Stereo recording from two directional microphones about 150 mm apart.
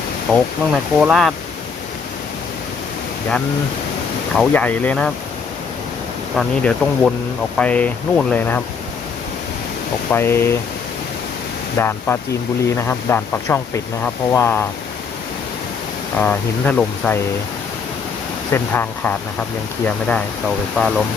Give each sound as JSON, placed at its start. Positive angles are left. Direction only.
{"t": 0.3, "sound": "speech", "side_deg": 0}
{"t": 4.4, "sound": "speech", "side_deg": 10}
{"t": 6.3, "sound": "speech", "side_deg": 5}
{"t": 10.1, "sound": "speech", "side_deg": 15}
{"t": 11.8, "sound": "speech", "side_deg": 15}
{"t": 16.1, "sound": "speech", "side_deg": 10}
{"t": 18.5, "sound": "speech", "side_deg": 15}
{"t": 20.7, "sound": "speech", "side_deg": 0}